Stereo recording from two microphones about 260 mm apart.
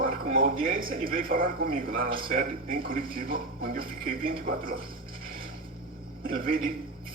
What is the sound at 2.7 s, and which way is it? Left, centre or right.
Speech, centre.